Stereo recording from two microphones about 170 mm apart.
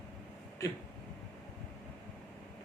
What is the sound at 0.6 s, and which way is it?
Speech, 20° left (ahead or behind).